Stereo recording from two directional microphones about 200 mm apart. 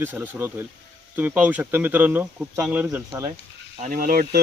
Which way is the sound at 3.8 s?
45° right (ahead or behind).